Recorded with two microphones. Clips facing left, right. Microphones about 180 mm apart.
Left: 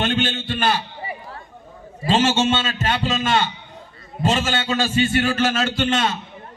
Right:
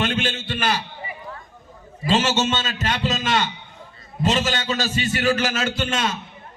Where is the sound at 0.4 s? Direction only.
40° left (ahead or behind).